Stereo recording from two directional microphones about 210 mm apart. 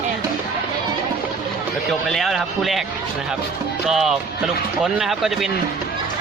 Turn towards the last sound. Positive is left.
turn(degrees=0)  # may be behind; listen again after turning